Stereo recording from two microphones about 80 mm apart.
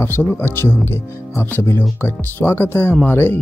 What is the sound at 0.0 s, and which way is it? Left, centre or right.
Speech, left.